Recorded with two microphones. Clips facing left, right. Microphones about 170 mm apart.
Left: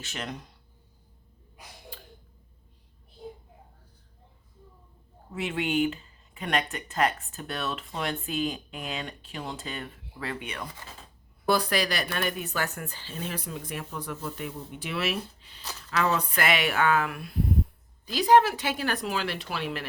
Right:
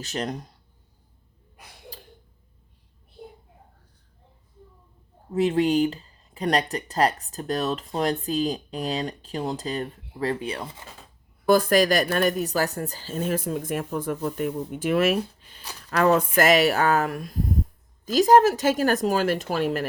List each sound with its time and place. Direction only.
0.0 s speech: 40° right (ahead or behind)
5.3 s speech: 35° right (ahead or behind)
11.4 s speech: 45° right (ahead or behind)